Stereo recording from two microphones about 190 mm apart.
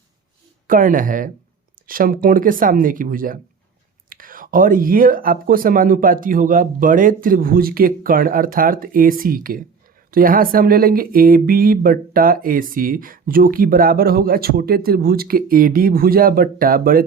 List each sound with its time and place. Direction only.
0.7 s speech: 45° right (ahead or behind)